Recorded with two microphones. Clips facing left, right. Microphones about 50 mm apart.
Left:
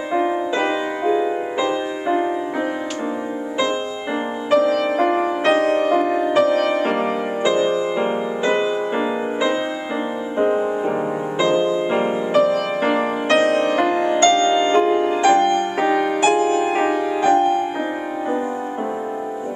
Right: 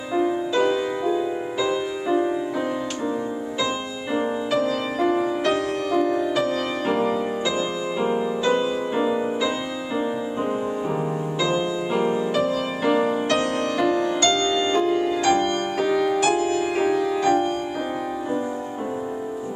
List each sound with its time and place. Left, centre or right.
0.1 s music: left
4.5 s music: left
6.4 s music: left
11.3 s music: left